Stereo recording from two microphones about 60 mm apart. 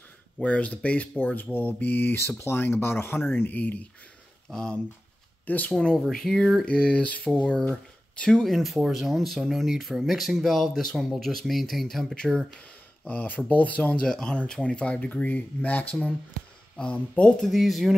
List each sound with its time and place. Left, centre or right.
0.4 s speech: left
4.5 s speech: centre
6.1 s a sound: centre
6.6 s speech: centre
8.5 s speech: centre
13.0 s speech: left
14.0 s speech: centre
17.4 s speech: centre